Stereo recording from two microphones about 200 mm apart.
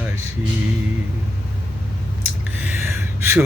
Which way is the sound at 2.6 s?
10° right (ahead or behind).